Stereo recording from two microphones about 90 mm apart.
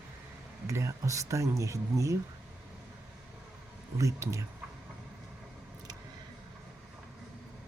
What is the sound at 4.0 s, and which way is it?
Speech, 35° right (ahead or behind).